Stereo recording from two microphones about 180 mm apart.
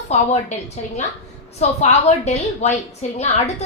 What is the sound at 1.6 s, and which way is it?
A woman's voice, 40° left (ahead or behind).